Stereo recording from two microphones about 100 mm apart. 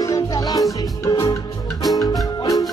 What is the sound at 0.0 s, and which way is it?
Music, 40° left (ahead or behind).